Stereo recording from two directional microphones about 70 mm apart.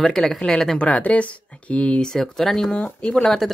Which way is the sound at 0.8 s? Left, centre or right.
Centre.